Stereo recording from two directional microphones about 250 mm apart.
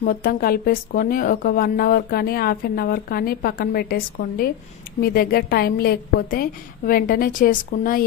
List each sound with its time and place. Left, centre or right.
0.0 s speech: left